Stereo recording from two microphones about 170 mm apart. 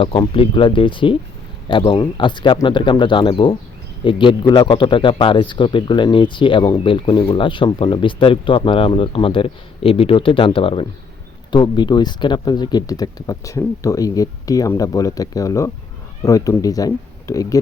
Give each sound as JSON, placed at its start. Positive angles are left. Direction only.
{"t": 0.0, "sound": "a man's voice", "side_deg": 30}